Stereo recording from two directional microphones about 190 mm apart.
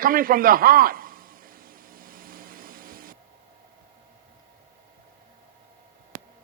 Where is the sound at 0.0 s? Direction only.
50° right (ahead or behind).